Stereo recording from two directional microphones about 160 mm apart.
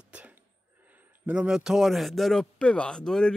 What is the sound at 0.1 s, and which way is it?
Cough, 10° right (ahead or behind).